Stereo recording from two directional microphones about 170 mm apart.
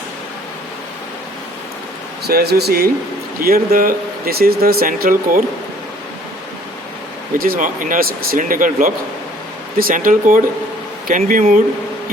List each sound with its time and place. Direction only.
2.2 s speech: 70° right (ahead or behind)
7.3 s speech: 60° right (ahead or behind)